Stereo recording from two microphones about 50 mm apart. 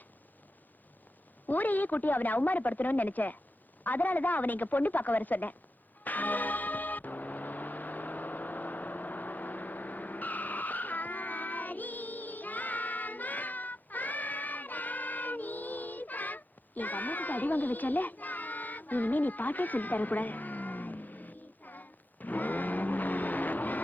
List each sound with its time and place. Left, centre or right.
1.5 s speech: left
6.1 s music: left